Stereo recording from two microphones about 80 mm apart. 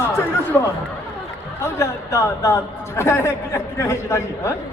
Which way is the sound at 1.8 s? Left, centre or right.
Left.